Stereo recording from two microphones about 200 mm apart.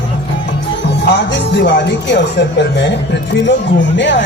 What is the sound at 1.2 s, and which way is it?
A man's voice, 60° left (ahead or behind).